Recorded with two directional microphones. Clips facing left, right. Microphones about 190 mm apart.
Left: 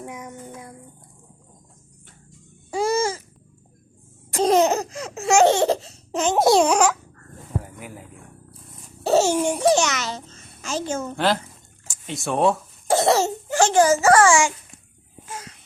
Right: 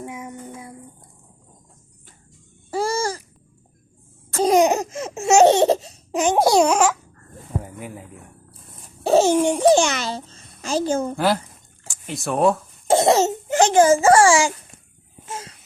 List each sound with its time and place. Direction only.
0.0 s a sound: 5° right (ahead or behind)
2.8 s babbling: 20° left (ahead or behind)
4.4 s laughter: 15° right (ahead or behind)
6.5 s a child's voice: centre (ahead or behind)
7.5 s a sound: 15° right (ahead or behind)
9.0 s laughter: 15° right (ahead or behind)
9.7 s a child's voice: 30° right (ahead or behind)
11.9 s speech: centre (ahead or behind)
12.9 s a child's voice: 20° right (ahead or behind)
15.3 s a sound: 25° right (ahead or behind)